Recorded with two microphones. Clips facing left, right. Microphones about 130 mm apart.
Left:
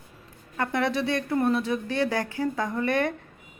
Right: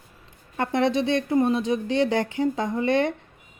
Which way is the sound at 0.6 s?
25° right (ahead or behind).